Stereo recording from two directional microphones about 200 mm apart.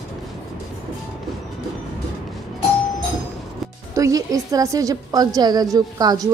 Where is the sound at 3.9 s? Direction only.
15° right (ahead or behind).